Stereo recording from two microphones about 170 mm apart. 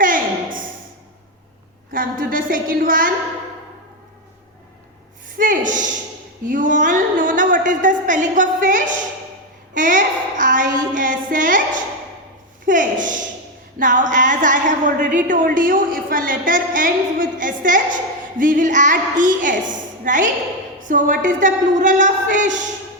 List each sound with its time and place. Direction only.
0.0 s a sound: 50° right (ahead or behind)
1.9 s a woman's voice: 55° right (ahead or behind)
5.4 s speech: 50° right (ahead or behind)
6.4 s a sound: 50° right (ahead or behind)
9.7 s child singing: 50° right (ahead or behind)
12.6 s a woman's voice: 50° right (ahead or behind)